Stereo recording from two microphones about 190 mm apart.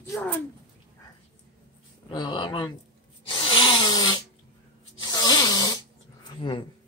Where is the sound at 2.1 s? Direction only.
25° left (ahead or behind).